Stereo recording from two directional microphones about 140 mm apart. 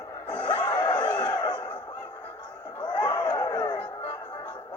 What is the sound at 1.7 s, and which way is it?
Bow-wow, 10° left (ahead or behind).